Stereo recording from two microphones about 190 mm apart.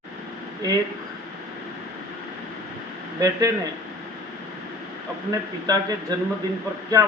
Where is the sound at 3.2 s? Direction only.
20° right (ahead or behind).